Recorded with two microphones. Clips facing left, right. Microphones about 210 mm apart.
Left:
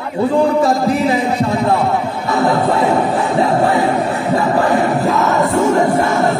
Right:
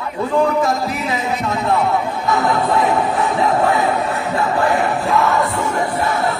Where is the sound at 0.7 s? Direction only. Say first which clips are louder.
Left 6 dB; 30° left (ahead or behind).